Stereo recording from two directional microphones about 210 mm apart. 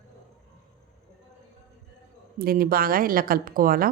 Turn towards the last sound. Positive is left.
turn(degrees=-45)  # may be behind; listen again after turning